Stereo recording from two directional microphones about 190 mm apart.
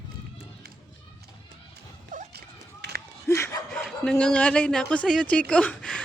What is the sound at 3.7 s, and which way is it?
A woman's voice, 5° left (ahead or behind).